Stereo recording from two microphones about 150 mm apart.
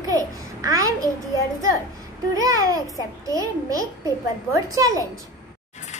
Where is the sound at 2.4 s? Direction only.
20° right (ahead or behind).